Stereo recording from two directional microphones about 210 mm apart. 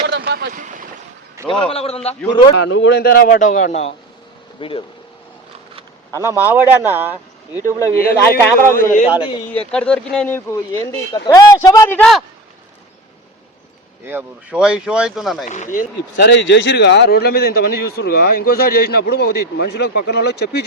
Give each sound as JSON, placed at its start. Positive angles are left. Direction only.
{"t": 0.1, "sound": "boat", "side_deg": -45}
{"t": 1.5, "sound": "a man's voice", "side_deg": 25}
{"t": 2.6, "sound": "a man's voice", "side_deg": 65}
{"t": 5.7, "sound": "a sound", "side_deg": -15}
{"t": 6.3, "sound": "speech", "side_deg": -10}
{"t": 7.5, "sound": "speech", "side_deg": 15}
{"t": 8.7, "sound": "a man's voice", "side_deg": 40}
{"t": 9.5, "sound": "speech", "side_deg": 5}
{"t": 14.0, "sound": "speech", "side_deg": -10}
{"t": 15.4, "sound": "speech", "side_deg": 35}